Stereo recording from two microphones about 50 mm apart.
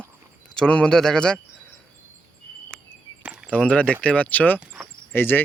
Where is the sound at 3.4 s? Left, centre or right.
Left.